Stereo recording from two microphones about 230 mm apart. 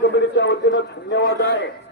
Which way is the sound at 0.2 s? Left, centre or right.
Left.